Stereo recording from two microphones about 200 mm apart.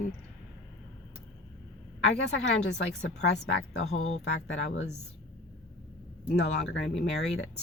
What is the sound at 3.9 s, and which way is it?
Speech, 90° left.